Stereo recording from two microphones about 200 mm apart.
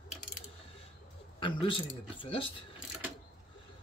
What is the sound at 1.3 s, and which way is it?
Speech, 25° left (ahead or behind).